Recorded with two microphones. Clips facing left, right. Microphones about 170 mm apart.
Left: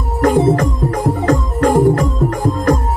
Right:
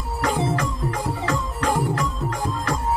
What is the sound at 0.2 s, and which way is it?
Music, 50° left (ahead or behind).